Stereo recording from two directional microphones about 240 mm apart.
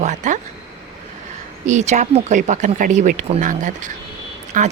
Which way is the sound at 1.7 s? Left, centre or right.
Right.